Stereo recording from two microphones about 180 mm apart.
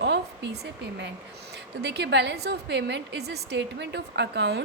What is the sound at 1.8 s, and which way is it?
A woman's voice, 70° right (ahead or behind).